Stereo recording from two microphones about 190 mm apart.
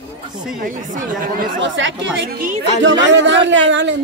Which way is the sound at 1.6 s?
75° right (ahead or behind).